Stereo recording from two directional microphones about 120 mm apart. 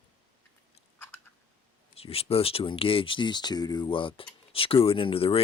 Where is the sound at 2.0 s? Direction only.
55° left (ahead or behind).